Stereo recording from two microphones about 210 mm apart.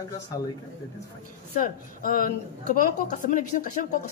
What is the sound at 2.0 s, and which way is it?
Speech, 40° left (ahead or behind).